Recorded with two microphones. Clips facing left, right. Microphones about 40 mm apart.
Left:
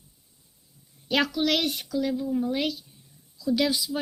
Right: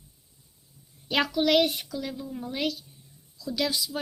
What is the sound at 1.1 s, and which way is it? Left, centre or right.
Speech, centre.